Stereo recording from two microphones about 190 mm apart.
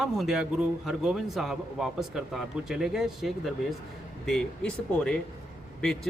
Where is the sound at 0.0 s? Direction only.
Centre (ahead or behind).